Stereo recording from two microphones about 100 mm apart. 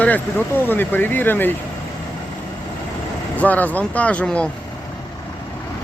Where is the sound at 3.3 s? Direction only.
15° left (ahead or behind).